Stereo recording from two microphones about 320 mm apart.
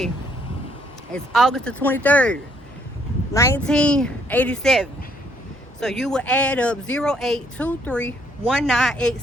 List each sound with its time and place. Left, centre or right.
1.1 s speech: centre